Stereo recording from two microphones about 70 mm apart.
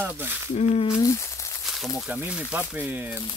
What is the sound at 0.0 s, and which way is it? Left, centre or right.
Speech, right.